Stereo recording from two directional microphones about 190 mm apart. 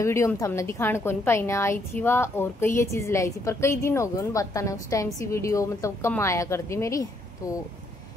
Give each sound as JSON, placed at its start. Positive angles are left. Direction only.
{"t": 0.0, "sound": "a woman's voice", "side_deg": 15}